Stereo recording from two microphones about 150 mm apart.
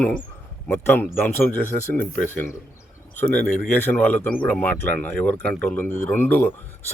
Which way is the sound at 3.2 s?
5° left (ahead or behind).